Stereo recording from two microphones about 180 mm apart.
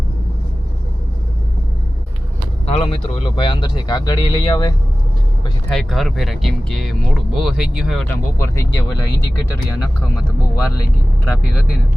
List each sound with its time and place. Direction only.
2.6 s a sound: 35° left (ahead or behind)
3.2 s speech: 25° left (ahead or behind)
5.7 s speech: centre (ahead or behind)
8.4 s speech: 15° left (ahead or behind)